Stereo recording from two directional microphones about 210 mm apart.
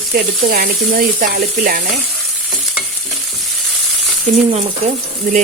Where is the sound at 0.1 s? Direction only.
45° right (ahead or behind).